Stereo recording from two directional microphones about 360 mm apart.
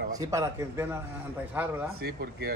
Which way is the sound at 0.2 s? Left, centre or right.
Centre.